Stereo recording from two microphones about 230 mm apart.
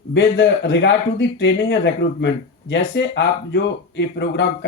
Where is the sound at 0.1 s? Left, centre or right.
Left.